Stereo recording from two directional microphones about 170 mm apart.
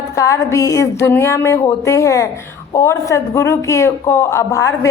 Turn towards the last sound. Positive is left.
turn(degrees=15)  # may be behind; listen again after turning